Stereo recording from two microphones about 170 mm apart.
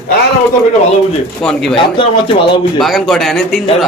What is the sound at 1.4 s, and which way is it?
Speech, 5° left (ahead or behind).